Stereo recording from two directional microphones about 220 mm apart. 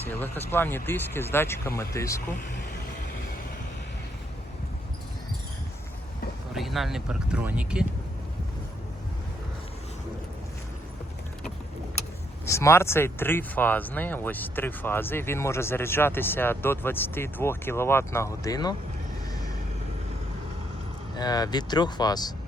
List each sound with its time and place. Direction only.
0.0 s speech: 10° left (ahead or behind)
6.5 s speech: centre (ahead or behind)
12.5 s speech: 10° left (ahead or behind)
21.2 s speech: 15° left (ahead or behind)